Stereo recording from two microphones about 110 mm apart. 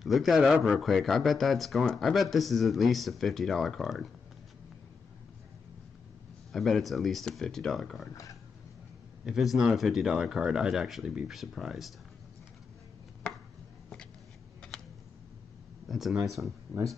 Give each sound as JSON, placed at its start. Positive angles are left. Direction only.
{"t": 0.0, "sound": "speech", "side_deg": 0}
{"t": 6.5, "sound": "speech", "side_deg": 0}
{"t": 8.1, "sound": "speech", "side_deg": 30}
{"t": 9.2, "sound": "speech", "side_deg": -5}
{"t": 15.9, "sound": "speech", "side_deg": 0}